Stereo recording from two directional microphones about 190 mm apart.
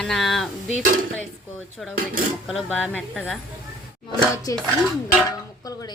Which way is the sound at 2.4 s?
Centre (ahead or behind).